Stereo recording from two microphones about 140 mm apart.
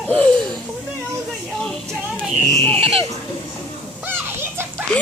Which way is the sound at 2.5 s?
10° left (ahead or behind).